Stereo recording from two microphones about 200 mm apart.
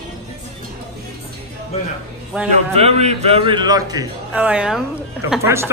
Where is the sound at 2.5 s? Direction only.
35° right (ahead or behind).